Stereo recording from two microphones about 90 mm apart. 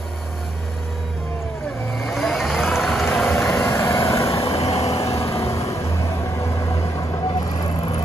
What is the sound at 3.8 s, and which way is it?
Vehicle, 30° left (ahead or behind).